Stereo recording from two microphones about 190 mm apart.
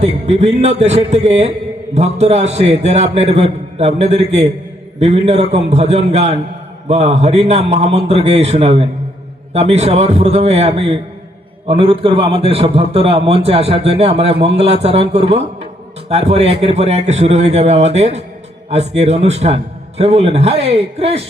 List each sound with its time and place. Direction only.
0.0 s a man's voice: 35° right (ahead or behind)